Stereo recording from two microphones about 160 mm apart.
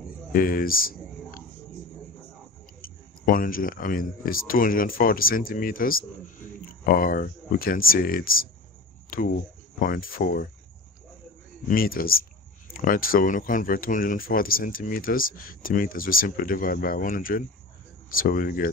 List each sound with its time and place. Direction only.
0.3 s a sound: 65° left (ahead or behind)
2.8 s speech: 60° left (ahead or behind)
11.6 s speech: 65° left (ahead or behind)